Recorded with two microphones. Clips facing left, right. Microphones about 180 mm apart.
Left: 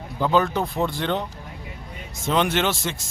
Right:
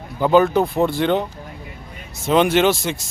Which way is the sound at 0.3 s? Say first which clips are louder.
Right 7 dB; 10° right (ahead or behind).